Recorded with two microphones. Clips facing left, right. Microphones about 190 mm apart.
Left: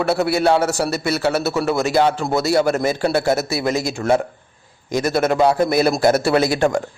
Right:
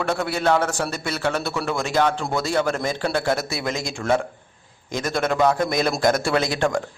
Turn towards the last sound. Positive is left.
turn(degrees=10)  # may be behind; listen again after turning